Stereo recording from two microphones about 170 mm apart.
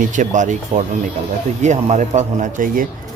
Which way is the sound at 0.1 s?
45° right (ahead or behind).